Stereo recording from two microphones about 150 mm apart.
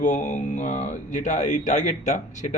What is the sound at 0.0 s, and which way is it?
Speech, 55° left (ahead or behind).